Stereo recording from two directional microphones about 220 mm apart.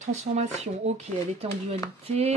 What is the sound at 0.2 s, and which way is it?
Speech, 30° right (ahead or behind).